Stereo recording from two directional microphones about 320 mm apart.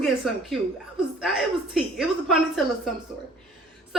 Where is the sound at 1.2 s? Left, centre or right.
Centre.